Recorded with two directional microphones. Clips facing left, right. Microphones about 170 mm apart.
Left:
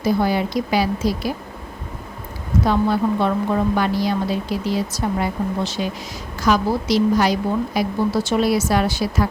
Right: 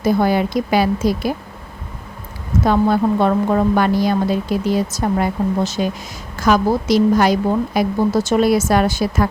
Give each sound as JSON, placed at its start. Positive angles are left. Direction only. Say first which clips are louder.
{"t": 0.0, "sound": "a woman's voice", "louder": "right 3 dB", "side_deg": -50}
{"t": 2.6, "sound": "a woman's voice", "louder": "right 4 dB", "side_deg": -50}